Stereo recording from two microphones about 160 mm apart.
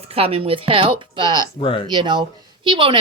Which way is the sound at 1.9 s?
30° right (ahead or behind).